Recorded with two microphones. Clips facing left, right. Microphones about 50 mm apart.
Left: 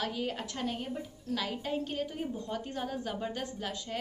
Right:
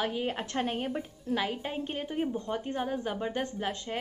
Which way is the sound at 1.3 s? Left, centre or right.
Right.